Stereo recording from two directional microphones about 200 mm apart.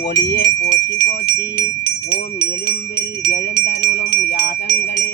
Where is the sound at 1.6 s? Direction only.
55° left (ahead or behind).